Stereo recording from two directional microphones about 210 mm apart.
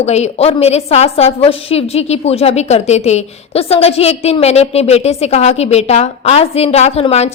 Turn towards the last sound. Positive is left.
turn(degrees=30)  # may be behind; listen again after turning